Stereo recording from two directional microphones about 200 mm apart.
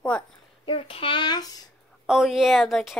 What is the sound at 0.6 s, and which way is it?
A child's voice, 25° left (ahead or behind).